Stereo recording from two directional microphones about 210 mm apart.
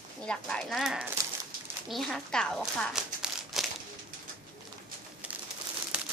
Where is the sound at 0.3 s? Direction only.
5° left (ahead or behind).